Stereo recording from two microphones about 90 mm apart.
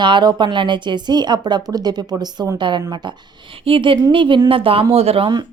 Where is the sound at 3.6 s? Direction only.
75° right (ahead or behind).